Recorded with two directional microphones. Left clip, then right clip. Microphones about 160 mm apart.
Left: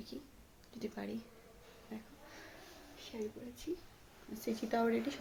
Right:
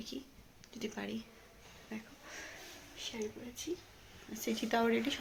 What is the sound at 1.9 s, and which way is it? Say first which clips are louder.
Speech: right 5 dB; 15° right (ahead or behind).